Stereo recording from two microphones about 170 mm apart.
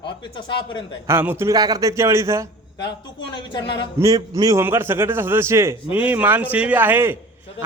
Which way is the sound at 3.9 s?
20° right (ahead or behind).